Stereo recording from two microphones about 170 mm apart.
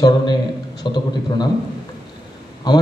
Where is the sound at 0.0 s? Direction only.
25° left (ahead or behind).